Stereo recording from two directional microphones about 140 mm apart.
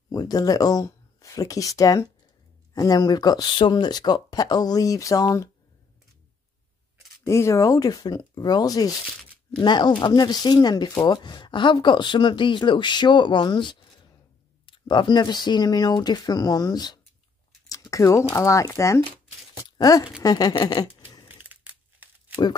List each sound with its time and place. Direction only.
0.1 s speech: 25° left (ahead or behind)
7.2 s speech: 20° left (ahead or behind)
17.6 s a sound: 25° left (ahead or behind)
18.3 s speech: 20° left (ahead or behind)
21.4 s crumpling: 10° right (ahead or behind)
22.3 s speech: 30° left (ahead or behind)